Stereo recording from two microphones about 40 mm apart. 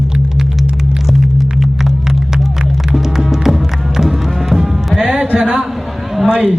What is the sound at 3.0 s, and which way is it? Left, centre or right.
Music, centre.